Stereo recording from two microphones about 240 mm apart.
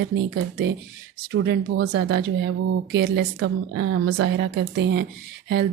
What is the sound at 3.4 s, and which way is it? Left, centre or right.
Speech, right.